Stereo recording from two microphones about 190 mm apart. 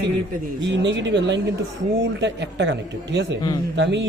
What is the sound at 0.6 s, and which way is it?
A woman's voice, 70° right (ahead or behind).